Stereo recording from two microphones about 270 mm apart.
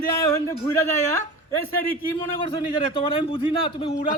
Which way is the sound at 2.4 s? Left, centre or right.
Centre.